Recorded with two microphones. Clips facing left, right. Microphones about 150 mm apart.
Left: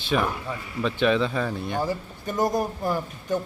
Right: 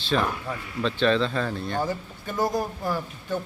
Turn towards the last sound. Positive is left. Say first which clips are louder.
# left 2 dB
turn(degrees=20)  # may be behind; listen again after turning